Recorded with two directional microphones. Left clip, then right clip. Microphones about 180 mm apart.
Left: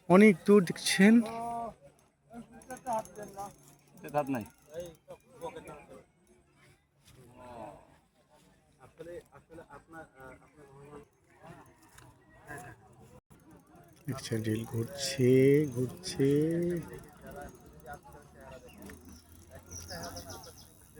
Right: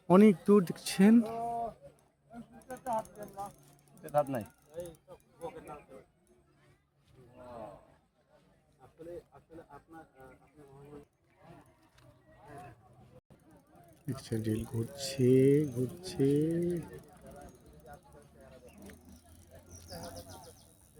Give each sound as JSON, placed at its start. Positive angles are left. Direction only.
{"t": 0.1, "sound": "speech", "side_deg": -10}
{"t": 2.3, "sound": "a sound", "side_deg": -5}
{"t": 3.2, "sound": "vehicle", "side_deg": -10}
{"t": 4.3, "sound": "speech", "side_deg": -15}
{"t": 4.7, "sound": "a sound", "side_deg": 5}
{"t": 5.5, "sound": "a sound", "side_deg": -5}
{"t": 9.6, "sound": "a man's voice", "side_deg": 5}
{"t": 14.0, "sound": "speech", "side_deg": -15}
{"t": 19.9, "sound": "bird", "side_deg": 0}